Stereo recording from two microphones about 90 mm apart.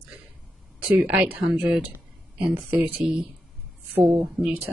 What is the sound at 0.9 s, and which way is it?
Speech, 15° right (ahead or behind).